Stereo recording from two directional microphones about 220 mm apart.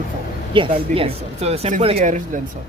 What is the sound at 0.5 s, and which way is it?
Speech, 25° right (ahead or behind).